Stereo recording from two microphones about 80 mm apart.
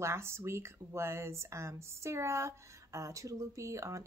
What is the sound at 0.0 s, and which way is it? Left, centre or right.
Speech, right.